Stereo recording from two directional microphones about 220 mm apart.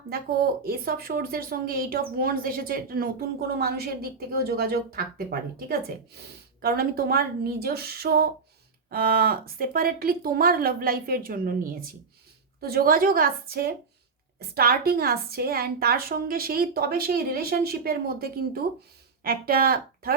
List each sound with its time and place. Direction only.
0.1 s speech: 45° right (ahead or behind)